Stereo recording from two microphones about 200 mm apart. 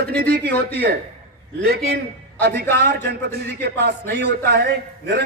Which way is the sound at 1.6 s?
55° right (ahead or behind).